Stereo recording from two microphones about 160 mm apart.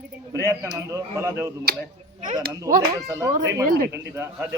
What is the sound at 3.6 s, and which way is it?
Speech, 65° right (ahead or behind).